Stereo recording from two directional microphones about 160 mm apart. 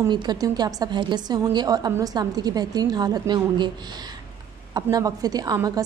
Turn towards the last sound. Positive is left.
turn(degrees=-25)  # may be behind; listen again after turning